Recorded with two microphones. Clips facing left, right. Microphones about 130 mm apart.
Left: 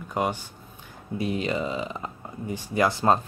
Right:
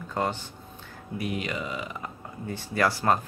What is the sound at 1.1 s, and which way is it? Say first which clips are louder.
Speech: left 4 dB; 30° left (ahead or behind).